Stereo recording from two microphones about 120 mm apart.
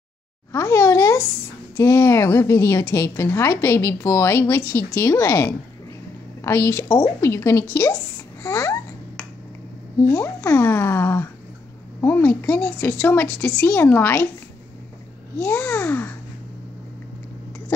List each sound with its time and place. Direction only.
0.5 s a sound: 25° left (ahead or behind)
1.8 s a woman's voice: 25° left (ahead or behind)
8.4 s babbling: 25° left (ahead or behind)
10.0 s a woman's voice: 20° left (ahead or behind)
15.3 s a woman's voice: 20° left (ahead or behind)